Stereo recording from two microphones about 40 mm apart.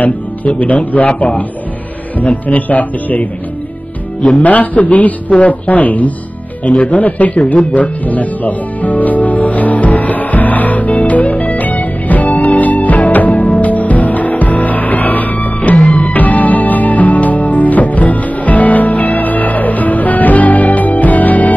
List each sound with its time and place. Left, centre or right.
0.6 s a man's voice: left
4.4 s a man's voice: left
7.4 s music: left